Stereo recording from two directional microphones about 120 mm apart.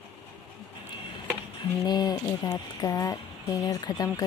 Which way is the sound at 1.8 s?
35° left (ahead or behind).